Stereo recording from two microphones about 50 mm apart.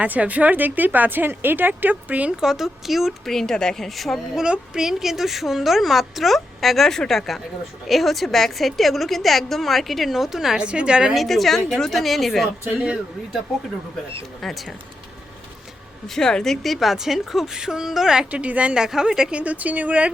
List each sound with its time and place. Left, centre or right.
0.0 s speech: right
2.4 s a woman's voice: centre
3.8 s a woman's voice: centre
4.4 s a woman's voice: centre
10.6 s speech: right
11.1 s a woman's voice: centre
12.8 s speech: right
14.4 s a woman's voice: centre
16.0 s a woman's voice: centre
18.3 s speech: right
18.8 s a woman's voice: centre
19.4 s speech: right